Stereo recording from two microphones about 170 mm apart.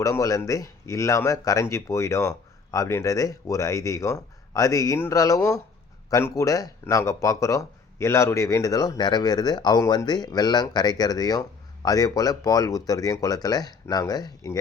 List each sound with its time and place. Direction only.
0.0 s speech: 20° left (ahead or behind)